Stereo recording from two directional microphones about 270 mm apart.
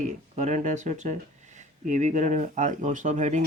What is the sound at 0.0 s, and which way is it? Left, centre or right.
Speech, right.